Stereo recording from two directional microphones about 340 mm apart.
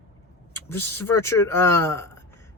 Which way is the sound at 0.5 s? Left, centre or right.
Centre.